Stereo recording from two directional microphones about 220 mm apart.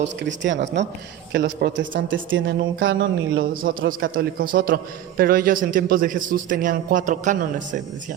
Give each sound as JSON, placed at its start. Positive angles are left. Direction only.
{"t": 0.0, "sound": "speech", "side_deg": -55}
{"t": 3.5, "sound": "a man's voice", "side_deg": -40}